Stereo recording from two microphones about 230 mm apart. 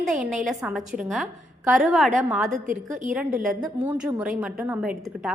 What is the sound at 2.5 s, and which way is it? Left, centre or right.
Speech, right.